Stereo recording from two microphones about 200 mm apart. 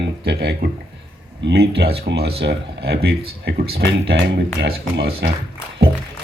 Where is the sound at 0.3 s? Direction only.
55° right (ahead or behind).